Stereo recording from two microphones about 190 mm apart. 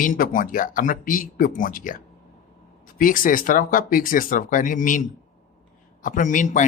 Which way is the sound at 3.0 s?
45° left (ahead or behind).